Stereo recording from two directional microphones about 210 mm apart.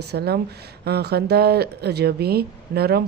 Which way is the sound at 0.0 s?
50° right (ahead or behind).